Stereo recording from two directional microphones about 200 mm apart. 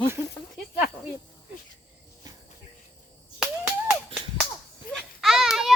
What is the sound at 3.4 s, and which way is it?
Finger snapping, 5° right (ahead or behind).